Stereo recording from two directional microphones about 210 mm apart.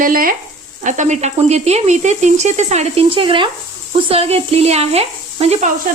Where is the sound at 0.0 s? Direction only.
40° right (ahead or behind).